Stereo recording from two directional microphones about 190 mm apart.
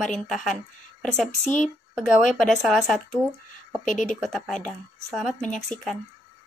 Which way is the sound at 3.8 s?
40° left (ahead or behind).